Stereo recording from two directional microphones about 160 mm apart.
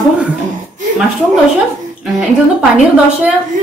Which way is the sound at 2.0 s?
5° right (ahead or behind).